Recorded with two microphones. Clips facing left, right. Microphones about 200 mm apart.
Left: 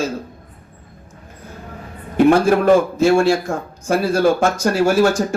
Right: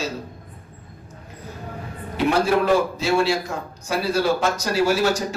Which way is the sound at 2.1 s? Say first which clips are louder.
Left 7 dB; 50° left (ahead or behind).